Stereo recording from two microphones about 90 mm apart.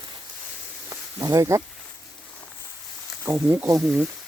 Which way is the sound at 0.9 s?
40° right (ahead or behind).